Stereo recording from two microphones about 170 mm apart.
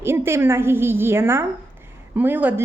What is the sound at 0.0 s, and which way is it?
A woman's voice, 15° right (ahead or behind).